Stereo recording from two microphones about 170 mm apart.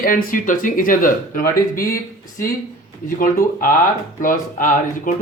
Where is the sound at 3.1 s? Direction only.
55° left (ahead or behind).